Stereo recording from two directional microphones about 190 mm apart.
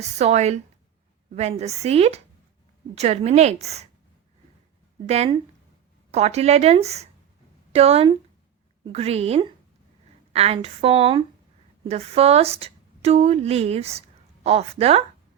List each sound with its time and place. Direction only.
0.0 s a woman's voice: 35° right (ahead or behind)
5.0 s a woman's voice: 35° right (ahead or behind)